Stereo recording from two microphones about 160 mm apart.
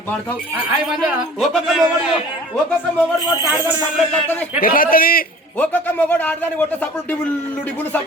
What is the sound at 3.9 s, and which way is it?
Speech, 5° left (ahead or behind).